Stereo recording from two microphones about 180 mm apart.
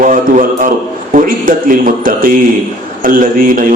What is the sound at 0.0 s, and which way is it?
A man's voice, 45° right (ahead or behind).